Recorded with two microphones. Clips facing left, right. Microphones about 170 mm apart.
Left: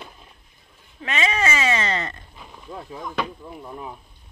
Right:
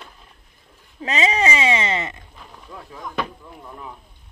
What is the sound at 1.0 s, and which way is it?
Speech, 30° right (ahead or behind).